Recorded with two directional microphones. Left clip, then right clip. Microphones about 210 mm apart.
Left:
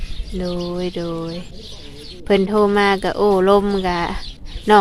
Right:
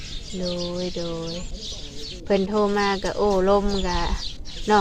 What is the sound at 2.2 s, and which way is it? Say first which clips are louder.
Speech: left 6 dB; 40° left (ahead or behind).